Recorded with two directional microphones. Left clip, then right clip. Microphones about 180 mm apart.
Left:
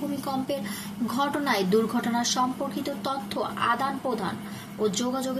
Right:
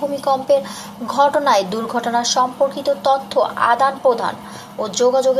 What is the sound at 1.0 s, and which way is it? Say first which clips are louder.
A woman's voice: right 12 dB; 15° left (ahead or behind).